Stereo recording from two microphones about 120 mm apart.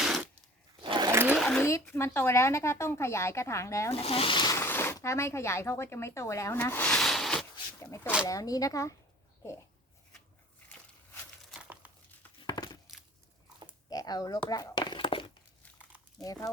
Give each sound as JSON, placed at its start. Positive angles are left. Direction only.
{"t": 0.0, "sound": "tearing", "side_deg": -5}
{"t": 0.8, "sound": "sewing machine", "side_deg": -40}
{"t": 1.1, "sound": "sewing machine", "side_deg": -20}
{"t": 1.4, "sound": "a sound", "side_deg": 5}
{"t": 2.0, "sound": "speech", "side_deg": 20}
{"t": 4.0, "sound": "speech", "side_deg": 50}
{"t": 4.5, "sound": "speech", "side_deg": 20}
{"t": 6.9, "sound": "a sound", "side_deg": 5}
{"t": 7.8, "sound": "speech", "side_deg": 20}
{"t": 11.6, "sound": "crumpling", "side_deg": -15}
{"t": 12.5, "sound": "a sound", "side_deg": 35}
{"t": 13.9, "sound": "a sound", "side_deg": 30}
{"t": 16.2, "sound": "speech", "side_deg": 30}